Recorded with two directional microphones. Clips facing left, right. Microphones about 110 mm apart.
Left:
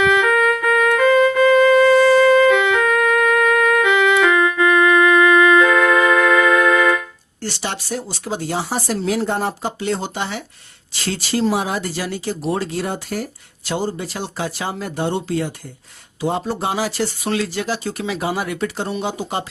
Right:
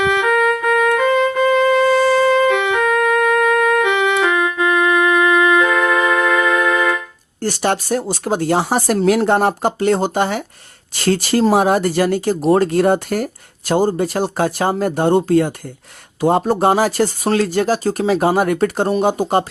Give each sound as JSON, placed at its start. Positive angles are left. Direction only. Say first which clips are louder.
{"t": 0.0, "sound": "music", "louder": "left 1 dB", "side_deg": -30}
{"t": 0.3, "sound": "music", "louder": "right 1 dB", "side_deg": -40}
{"t": 0.9, "sound": "music", "louder": "left 4 dB", "side_deg": -30}
{"t": 7.4, "sound": "speech", "louder": "right 8 dB", "side_deg": -50}